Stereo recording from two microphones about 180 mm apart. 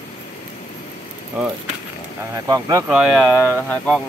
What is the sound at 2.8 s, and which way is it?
Speech, 5° right (ahead or behind).